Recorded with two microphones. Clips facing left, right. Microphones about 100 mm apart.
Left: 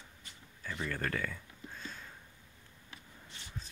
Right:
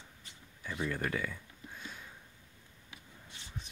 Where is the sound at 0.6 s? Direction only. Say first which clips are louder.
Right 2 dB; 15° right (ahead or behind).